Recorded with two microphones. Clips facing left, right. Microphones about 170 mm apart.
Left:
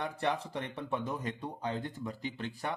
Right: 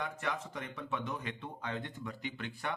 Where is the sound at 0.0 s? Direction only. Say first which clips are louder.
Left 4 dB; 35° left (ahead or behind).